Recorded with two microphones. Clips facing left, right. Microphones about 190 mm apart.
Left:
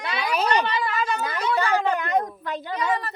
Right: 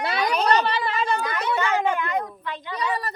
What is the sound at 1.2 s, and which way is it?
Speech, 30° left (ahead or behind).